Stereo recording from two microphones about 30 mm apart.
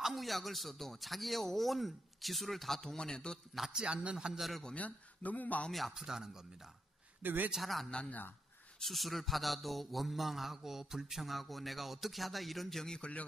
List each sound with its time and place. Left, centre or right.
0.1 s mantra: centre
3.7 s a man's voice: right
4.3 s mantra: centre
4.7 s a man's voice: left
5.7 s mantra: centre
5.9 s speech: centre
7.2 s speech: right
7.9 s speech: left
8.8 s mantra: centre
13.0 s speech: left